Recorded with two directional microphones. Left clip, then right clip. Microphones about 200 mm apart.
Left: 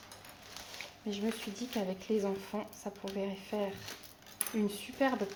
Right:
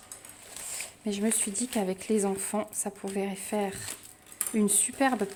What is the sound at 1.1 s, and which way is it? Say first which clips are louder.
Speech: right 7 dB; 60° right (ahead or behind).